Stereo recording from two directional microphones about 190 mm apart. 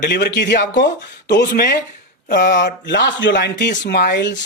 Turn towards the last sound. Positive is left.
turn(degrees=65)  # may be behind; listen again after turning